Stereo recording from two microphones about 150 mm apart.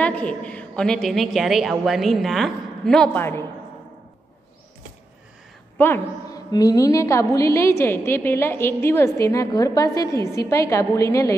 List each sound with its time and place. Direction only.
0.0 s a woman's voice: 10° left (ahead or behind)
5.8 s a woman's voice: 15° left (ahead or behind)
6.3 s a woman's voice: 25° left (ahead or behind)